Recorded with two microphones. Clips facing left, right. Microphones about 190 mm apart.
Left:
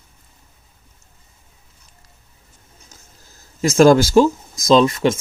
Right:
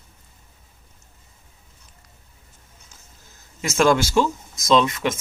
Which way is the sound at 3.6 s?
35° left (ahead or behind).